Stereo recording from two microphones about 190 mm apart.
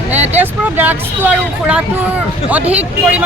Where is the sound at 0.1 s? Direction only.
10° right (ahead or behind).